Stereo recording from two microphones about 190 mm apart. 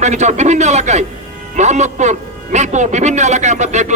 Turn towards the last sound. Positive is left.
turn(degrees=-35)  # may be behind; listen again after turning